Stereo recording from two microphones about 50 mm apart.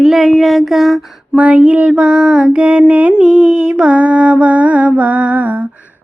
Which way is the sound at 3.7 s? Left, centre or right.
Right.